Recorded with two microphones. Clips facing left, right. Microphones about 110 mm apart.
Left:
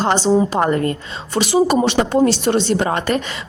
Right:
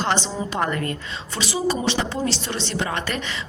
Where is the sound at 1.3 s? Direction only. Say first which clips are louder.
Left 9 dB; 50° left (ahead or behind).